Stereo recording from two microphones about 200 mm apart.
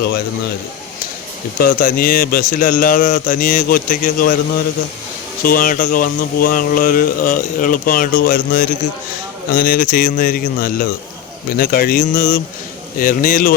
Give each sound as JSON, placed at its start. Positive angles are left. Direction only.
{"t": 1.5, "sound": "speech", "side_deg": 50}
{"t": 5.5, "sound": "speech", "side_deg": 45}